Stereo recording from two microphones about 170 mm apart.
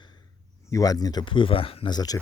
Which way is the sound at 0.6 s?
20° left (ahead or behind).